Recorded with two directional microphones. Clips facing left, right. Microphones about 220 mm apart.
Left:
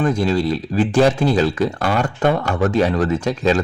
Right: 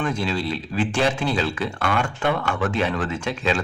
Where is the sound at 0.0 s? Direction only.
40° left (ahead or behind).